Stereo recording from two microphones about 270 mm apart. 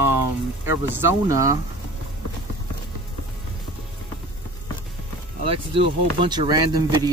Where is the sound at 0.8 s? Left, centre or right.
Centre.